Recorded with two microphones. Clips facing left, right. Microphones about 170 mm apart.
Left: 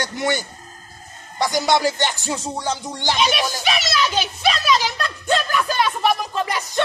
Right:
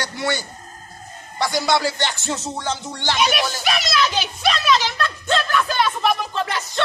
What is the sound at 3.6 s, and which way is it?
A child's voice, centre (ahead or behind).